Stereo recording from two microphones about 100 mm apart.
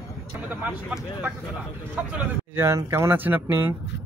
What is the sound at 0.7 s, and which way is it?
Speech, 5° right (ahead or behind).